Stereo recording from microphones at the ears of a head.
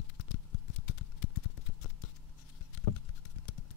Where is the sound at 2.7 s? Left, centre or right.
Left.